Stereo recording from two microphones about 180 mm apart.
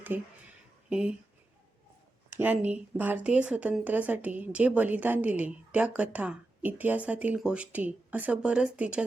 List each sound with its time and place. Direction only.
0.1 s speech: 10° right (ahead or behind)
2.3 s speech: 10° right (ahead or behind)